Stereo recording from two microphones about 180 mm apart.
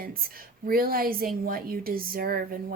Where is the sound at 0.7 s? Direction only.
55° right (ahead or behind).